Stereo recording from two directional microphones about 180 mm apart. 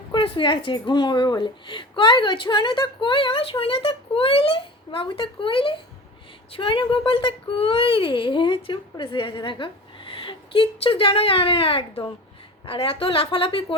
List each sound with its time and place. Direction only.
0.1 s a woman's voice: 30° left (ahead or behind)